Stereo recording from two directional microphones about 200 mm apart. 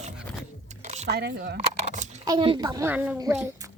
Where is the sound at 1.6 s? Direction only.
35° right (ahead or behind).